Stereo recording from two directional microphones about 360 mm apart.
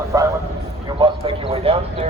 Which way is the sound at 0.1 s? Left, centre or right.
Centre.